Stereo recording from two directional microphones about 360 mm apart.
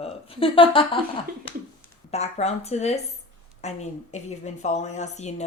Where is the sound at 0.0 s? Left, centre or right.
Centre.